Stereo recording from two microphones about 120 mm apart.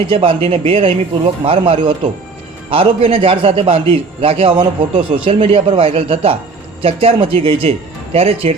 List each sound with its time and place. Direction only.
0.1 s a man's voice: 50° right (ahead or behind)